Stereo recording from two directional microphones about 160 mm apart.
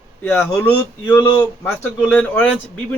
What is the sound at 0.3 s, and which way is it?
A man's voice, 10° left (ahead or behind).